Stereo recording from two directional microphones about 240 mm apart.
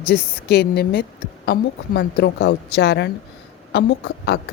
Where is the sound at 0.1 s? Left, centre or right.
Left.